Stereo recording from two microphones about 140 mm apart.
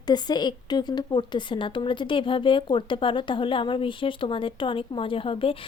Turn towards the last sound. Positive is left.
turn(degrees=40)  # may be behind; listen again after turning